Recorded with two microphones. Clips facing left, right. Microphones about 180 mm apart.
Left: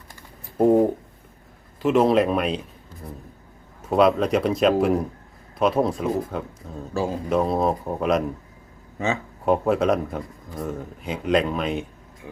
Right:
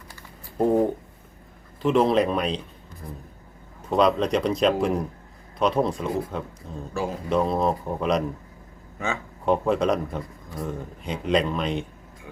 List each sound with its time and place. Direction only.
1.8 s speech: centre (ahead or behind)
3.8 s speech: 5° left (ahead or behind)
6.9 s speech: 25° left (ahead or behind)
7.3 s speech: 5° left (ahead or behind)
9.5 s speech: 5° left (ahead or behind)